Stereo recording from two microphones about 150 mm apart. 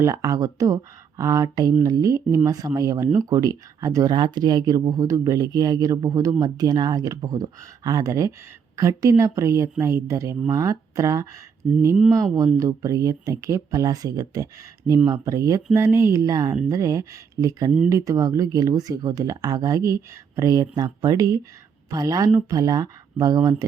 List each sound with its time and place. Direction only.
0.0 s a woman's voice: 20° right (ahead or behind)